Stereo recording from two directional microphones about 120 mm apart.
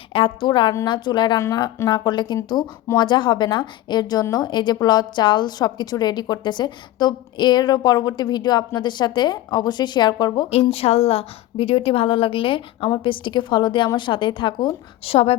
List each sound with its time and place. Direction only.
0.1 s a woman's voice: 45° left (ahead or behind)
1.4 s speech: 25° left (ahead or behind)
1.9 s speech: 40° left (ahead or behind)
10.6 s a woman's voice: 55° left (ahead or behind)